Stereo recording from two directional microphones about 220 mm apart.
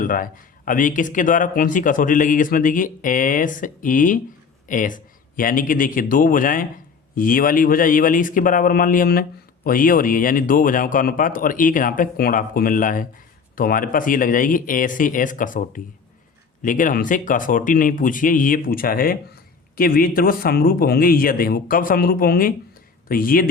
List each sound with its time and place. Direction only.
0.0 s a man's voice: 40° left (ahead or behind)